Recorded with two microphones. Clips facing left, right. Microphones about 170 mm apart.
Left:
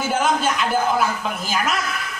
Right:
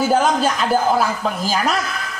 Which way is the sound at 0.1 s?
35° right (ahead or behind).